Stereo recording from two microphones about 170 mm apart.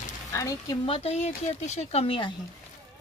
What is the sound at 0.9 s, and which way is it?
Speech, 35° left (ahead or behind).